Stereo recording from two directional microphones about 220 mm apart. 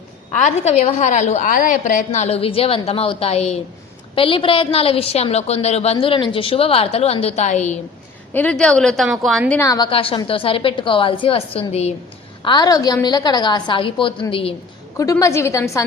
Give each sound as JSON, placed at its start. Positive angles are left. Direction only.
{"t": 0.4, "sound": "a woman's voice", "side_deg": 30}
{"t": 8.3, "sound": "a woman's voice", "side_deg": 5}
{"t": 9.6, "sound": "a woman's voice", "side_deg": 15}